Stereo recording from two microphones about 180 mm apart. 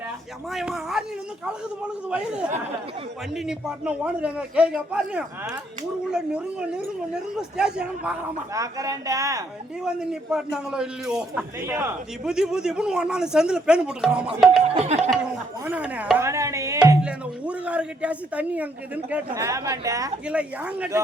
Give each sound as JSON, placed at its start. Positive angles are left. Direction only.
{"t": 0.5, "sound": "a man's voice", "side_deg": 0}
{"t": 2.0, "sound": "a man's voice", "side_deg": -5}
{"t": 8.5, "sound": "speech", "side_deg": -20}
{"t": 9.8, "sound": "a man's voice", "side_deg": -5}
{"t": 14.7, "sound": "music", "side_deg": -35}
{"t": 15.6, "sound": "a man's voice", "side_deg": -10}
{"t": 17.0, "sound": "a man's voice", "side_deg": -5}
{"t": 20.2, "sound": "a man's voice", "side_deg": -5}